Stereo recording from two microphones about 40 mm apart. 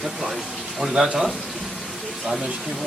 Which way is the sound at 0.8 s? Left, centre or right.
Centre.